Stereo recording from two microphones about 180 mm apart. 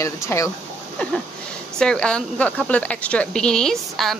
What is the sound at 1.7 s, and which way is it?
Speech, 5° left (ahead or behind).